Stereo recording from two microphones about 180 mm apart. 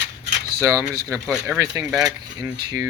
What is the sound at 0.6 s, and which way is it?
Speech, 20° right (ahead or behind).